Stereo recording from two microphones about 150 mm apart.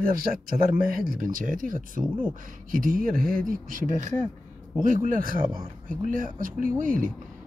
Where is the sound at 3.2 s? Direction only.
5° left (ahead or behind).